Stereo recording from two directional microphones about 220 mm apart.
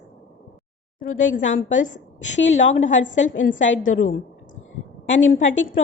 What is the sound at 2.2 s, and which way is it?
A woman's voice, 55° left (ahead or behind).